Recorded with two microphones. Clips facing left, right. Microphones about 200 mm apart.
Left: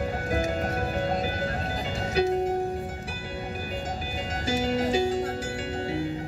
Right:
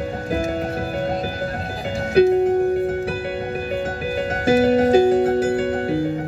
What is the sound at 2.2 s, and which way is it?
Music, 55° right (ahead or behind).